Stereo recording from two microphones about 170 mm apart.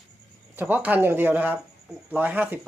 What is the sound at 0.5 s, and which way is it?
Speech, 10° right (ahead or behind).